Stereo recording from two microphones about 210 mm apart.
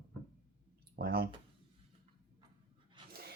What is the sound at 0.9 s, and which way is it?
Speech, 45° right (ahead or behind).